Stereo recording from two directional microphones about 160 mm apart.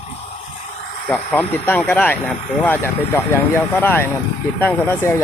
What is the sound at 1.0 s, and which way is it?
Speech, 10° left (ahead or behind).